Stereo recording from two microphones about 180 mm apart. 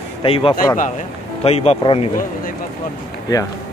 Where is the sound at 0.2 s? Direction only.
30° left (ahead or behind).